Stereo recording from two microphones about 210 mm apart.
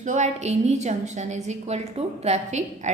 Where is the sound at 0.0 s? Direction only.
35° right (ahead or behind).